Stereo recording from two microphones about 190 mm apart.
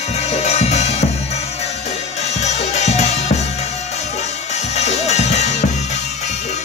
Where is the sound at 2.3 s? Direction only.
35° left (ahead or behind).